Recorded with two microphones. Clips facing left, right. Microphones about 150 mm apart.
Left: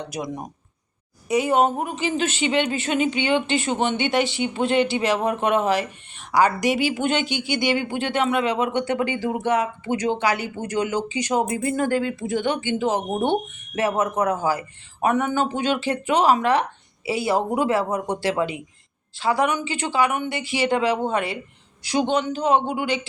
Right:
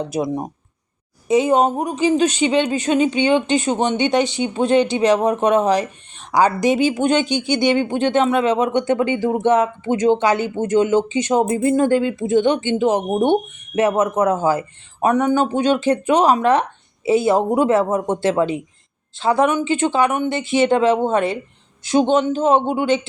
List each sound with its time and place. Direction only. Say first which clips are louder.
0.0 s a woman's voice: right 8 dB; 30° right (ahead or behind)